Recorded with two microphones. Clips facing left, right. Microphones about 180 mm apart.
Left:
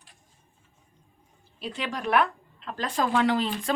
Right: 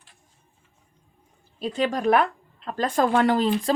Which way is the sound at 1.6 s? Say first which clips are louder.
Right 8 dB; 45° right (ahead or behind).